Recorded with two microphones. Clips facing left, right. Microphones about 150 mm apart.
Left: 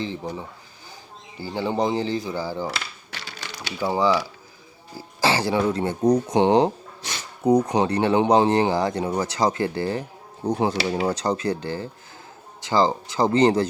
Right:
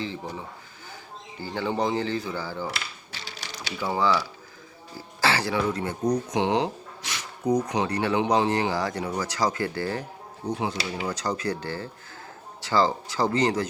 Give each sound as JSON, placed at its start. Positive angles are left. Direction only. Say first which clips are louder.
{"t": 1.4, "sound": "speech", "louder": "left 3 dB", "side_deg": 10}
{"t": 3.1, "sound": "typewriter", "louder": "left 3 dB", "side_deg": 55}
{"t": 3.8, "sound": "speech", "louder": "left 3 dB", "side_deg": 15}
{"t": 10.5, "sound": "speech", "louder": "left 7 dB", "side_deg": 45}